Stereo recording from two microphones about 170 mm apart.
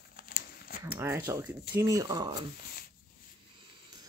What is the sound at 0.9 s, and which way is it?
Speech, 15° right (ahead or behind).